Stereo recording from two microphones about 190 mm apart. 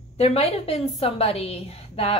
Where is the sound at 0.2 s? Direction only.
35° left (ahead or behind).